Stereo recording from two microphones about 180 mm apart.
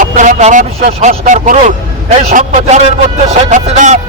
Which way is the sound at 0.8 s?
35° right (ahead or behind).